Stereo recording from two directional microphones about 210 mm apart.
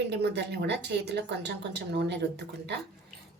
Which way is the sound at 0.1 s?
55° right (ahead or behind).